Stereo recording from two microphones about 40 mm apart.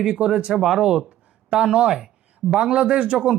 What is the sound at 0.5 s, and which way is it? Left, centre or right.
A man's voice, centre.